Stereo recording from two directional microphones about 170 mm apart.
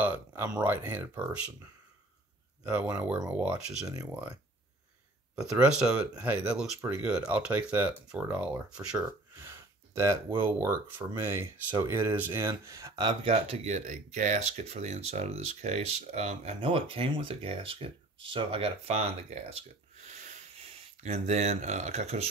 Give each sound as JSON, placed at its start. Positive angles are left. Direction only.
{"t": 0.0, "sound": "speech", "side_deg": -10}
{"t": 2.7, "sound": "speech", "side_deg": -10}
{"t": 5.3, "sound": "speech", "side_deg": -5}
{"t": 8.9, "sound": "a sound", "side_deg": -15}
{"t": 10.4, "sound": "speech", "side_deg": -15}
{"t": 13.2, "sound": "speech", "side_deg": -35}
{"t": 20.0, "sound": "a sound", "side_deg": -40}